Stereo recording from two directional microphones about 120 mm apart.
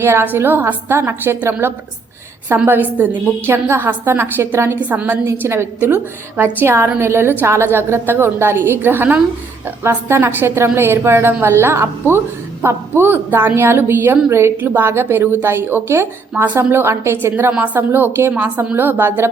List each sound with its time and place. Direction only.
0.0 s a woman's voice: 20° right (ahead or behind)